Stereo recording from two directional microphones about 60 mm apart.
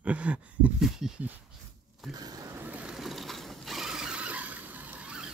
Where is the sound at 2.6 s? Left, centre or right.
Right.